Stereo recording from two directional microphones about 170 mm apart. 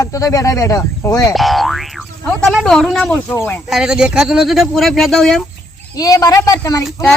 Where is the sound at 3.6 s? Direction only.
5° right (ahead or behind).